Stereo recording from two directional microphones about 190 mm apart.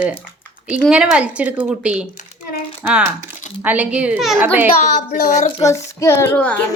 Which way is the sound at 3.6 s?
10° right (ahead or behind).